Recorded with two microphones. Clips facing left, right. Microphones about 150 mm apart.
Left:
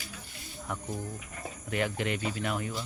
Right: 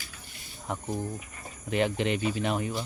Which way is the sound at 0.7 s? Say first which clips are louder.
Right 4 dB; 25° right (ahead or behind).